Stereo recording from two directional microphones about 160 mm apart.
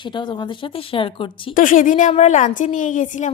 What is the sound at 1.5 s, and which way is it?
A woman's voice, 55° left (ahead or behind).